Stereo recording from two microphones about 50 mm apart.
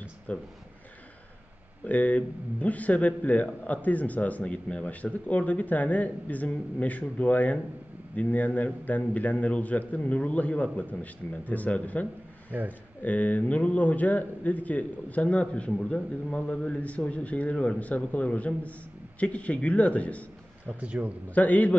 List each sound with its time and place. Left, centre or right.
0.3 s a man's voice: left
1.9 s speech: left
12.4 s a man's voice: right
13.0 s a man's voice: left
20.8 s speech: right
21.4 s speech: left